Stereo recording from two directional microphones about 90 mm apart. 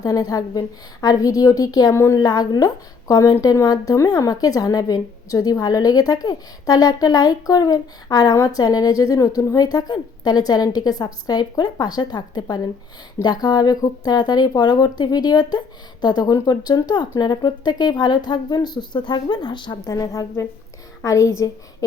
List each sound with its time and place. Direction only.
0.0 s speech: 45° left (ahead or behind)
19.9 s a woman's voice: 40° left (ahead or behind)